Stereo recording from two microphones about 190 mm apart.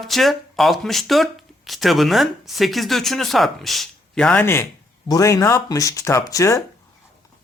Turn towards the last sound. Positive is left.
turn(degrees=15)  # may be behind; listen again after turning